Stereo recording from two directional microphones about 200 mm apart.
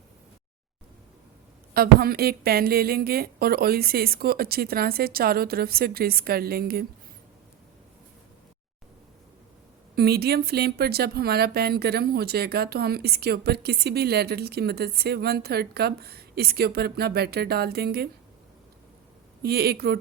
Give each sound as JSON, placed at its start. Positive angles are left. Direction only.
{"t": 1.7, "sound": "speech", "side_deg": -50}
{"t": 9.9, "sound": "speech", "side_deg": -50}
{"t": 19.4, "sound": "speech", "side_deg": -50}